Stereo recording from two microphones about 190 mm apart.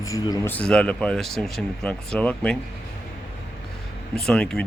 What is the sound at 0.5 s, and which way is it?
Speech, 5° left (ahead or behind).